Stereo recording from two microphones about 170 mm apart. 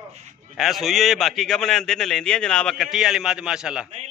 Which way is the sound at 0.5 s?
Centre (ahead or behind).